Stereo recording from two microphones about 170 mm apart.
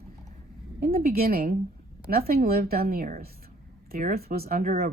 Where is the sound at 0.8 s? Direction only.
60° right (ahead or behind).